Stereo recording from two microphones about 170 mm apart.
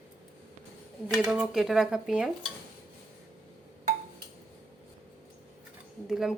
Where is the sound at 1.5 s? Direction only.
Centre (ahead or behind).